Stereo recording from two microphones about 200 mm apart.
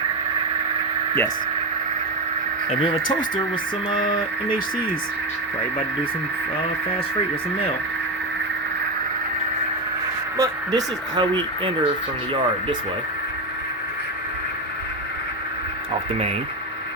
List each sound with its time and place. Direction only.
10.3 s speech: 15° right (ahead or behind)